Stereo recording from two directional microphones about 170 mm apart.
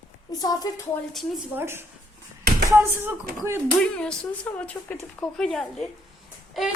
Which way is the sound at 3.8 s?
5° left (ahead or behind).